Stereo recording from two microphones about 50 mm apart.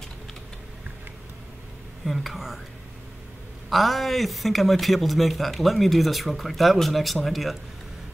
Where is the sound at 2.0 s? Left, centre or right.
Centre.